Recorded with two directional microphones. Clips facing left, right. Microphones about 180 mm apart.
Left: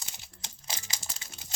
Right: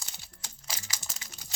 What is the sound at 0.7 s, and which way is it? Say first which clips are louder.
Crumpling: left 1 dB; 25° left (ahead or behind).